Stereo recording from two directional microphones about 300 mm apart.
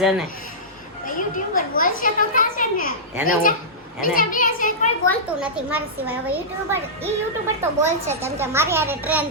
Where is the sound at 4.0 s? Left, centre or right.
Left.